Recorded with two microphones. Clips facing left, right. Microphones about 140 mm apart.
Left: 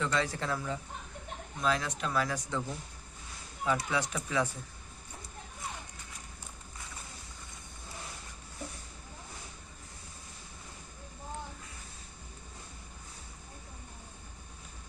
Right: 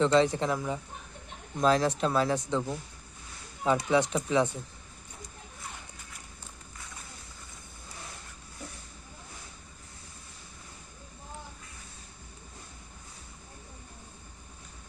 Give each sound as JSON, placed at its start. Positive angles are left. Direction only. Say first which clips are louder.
{"t": 0.0, "sound": "speech", "louder": "right 9 dB", "side_deg": -25}
{"t": 1.5, "sound": "speech", "louder": "right 7 dB", "side_deg": -35}